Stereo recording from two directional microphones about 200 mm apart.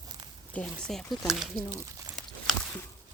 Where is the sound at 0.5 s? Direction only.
Centre (ahead or behind).